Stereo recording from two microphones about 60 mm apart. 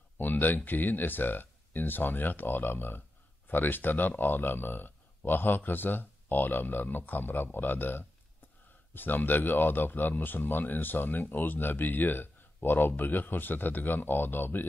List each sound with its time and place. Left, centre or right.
0.2 s speech: left